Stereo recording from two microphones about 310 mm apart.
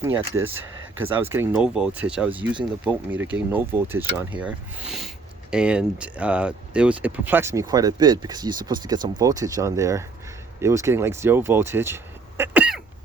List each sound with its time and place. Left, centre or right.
0.3 s speech: right
1.3 s speech: centre